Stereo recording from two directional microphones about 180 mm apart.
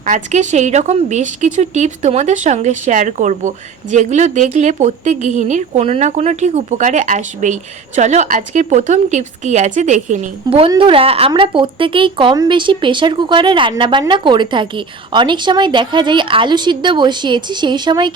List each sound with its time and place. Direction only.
0.0 s a woman's voice: 40° right (ahead or behind); by 18.1 s 25° right (ahead or behind)